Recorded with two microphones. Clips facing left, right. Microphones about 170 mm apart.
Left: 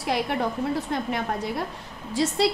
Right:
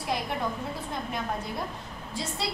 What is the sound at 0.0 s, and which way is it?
A woman's voice, 70° left (ahead or behind).